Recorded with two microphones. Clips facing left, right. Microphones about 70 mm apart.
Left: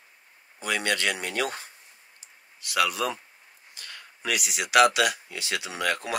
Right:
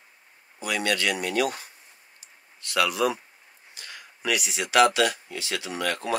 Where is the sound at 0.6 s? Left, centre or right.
Left.